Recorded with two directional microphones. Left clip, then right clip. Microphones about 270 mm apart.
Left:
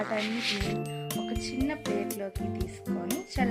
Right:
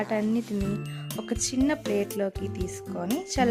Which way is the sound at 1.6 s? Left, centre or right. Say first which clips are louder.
Right 4 dB; right.